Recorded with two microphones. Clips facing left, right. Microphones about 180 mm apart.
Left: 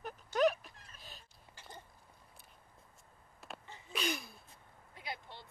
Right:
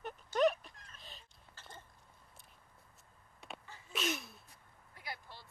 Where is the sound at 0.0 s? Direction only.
Centre (ahead or behind).